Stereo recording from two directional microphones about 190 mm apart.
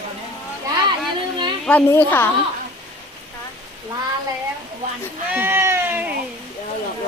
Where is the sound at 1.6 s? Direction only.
10° left (ahead or behind).